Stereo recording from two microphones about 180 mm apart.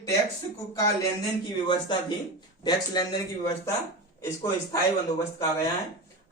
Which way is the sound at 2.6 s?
25° left (ahead or behind).